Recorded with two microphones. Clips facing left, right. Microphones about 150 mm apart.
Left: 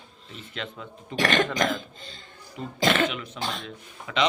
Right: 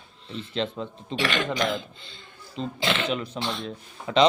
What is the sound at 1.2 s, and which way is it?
Speech, 45° left (ahead or behind).